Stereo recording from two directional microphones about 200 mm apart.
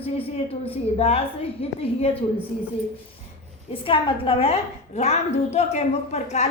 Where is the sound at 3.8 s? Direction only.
25° left (ahead or behind).